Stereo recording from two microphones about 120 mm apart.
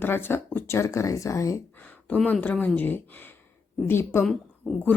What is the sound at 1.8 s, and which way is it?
Speech, 15° left (ahead or behind).